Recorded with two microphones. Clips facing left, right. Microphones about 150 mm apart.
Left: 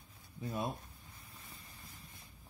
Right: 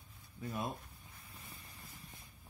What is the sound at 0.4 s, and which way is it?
Speech, 25° left (ahead or behind).